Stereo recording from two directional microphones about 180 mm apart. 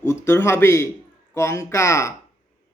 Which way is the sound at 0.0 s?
15° left (ahead or behind).